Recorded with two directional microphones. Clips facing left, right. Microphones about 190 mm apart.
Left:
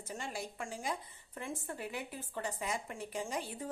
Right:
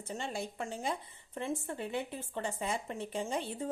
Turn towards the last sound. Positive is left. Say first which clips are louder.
# right 4 dB
turn(degrees=-25)  # may be behind; listen again after turning